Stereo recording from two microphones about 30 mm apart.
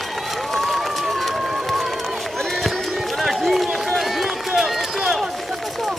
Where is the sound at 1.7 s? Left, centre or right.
Centre.